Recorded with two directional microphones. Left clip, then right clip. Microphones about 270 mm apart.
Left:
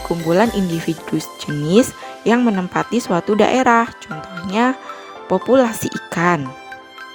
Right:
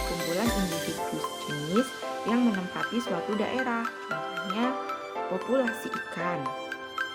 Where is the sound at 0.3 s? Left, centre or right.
Left.